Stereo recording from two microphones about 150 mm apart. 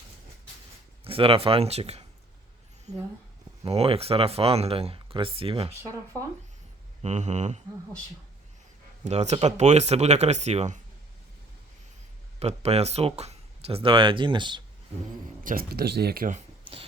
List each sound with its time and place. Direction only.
1.0 s speech: 40° right (ahead or behind)
3.7 s speech: 40° right (ahead or behind)
7.0 s speech: 50° right (ahead or behind)
9.0 s speech: 45° right (ahead or behind)
12.4 s speech: 45° right (ahead or behind)
15.4 s speech: 85° right